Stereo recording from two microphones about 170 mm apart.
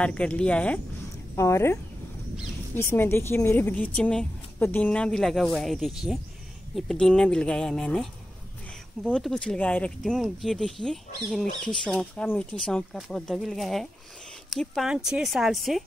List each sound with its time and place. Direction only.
0.0 s a woman's voice: 5° left (ahead or behind)
1.3 s a woman's voice: 15° left (ahead or behind); by 15.8 s centre (ahead or behind)